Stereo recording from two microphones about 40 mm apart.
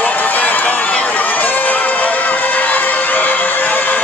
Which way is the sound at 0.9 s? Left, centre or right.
Left.